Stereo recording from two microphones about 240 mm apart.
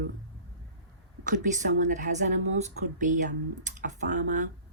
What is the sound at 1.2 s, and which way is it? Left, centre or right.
Speech, right.